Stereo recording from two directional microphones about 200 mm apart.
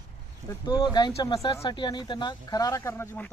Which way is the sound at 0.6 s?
20° left (ahead or behind).